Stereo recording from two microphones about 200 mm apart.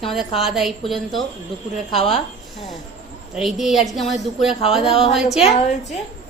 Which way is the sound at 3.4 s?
Centre (ahead or behind).